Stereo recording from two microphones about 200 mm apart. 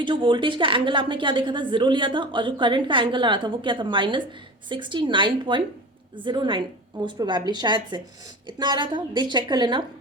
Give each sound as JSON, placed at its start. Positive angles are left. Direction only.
{"t": 0.0, "sound": "a woman's voice", "side_deg": -25}